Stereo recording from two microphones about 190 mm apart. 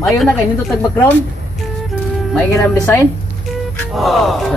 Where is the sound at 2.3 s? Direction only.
5° left (ahead or behind).